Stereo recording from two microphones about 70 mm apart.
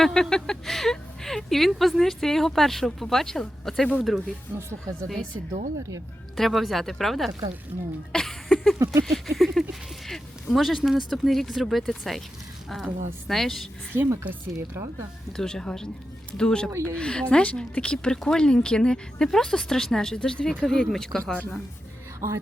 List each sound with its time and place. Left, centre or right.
0.0 s speech: centre
5.5 s speech: right
6.3 s speech: centre
7.3 s speech: right
8.1 s a sound: centre
9.0 s speech: centre
13.9 s speech: right
14.3 s speech: right
15.4 s speech: centre